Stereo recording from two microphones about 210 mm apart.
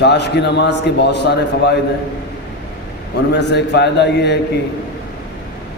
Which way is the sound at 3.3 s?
55° left (ahead or behind).